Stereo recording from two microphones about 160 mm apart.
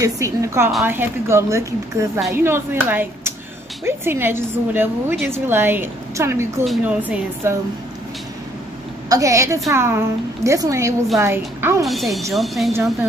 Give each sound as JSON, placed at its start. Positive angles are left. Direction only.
{"t": 0.0, "sound": "a woman's voice", "side_deg": -20}
{"t": 9.1, "sound": "a woman's voice", "side_deg": -20}
{"t": 11.8, "sound": "speech", "side_deg": 0}